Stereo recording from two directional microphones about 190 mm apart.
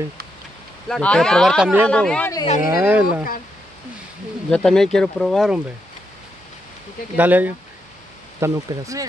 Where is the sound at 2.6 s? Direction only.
15° right (ahead or behind).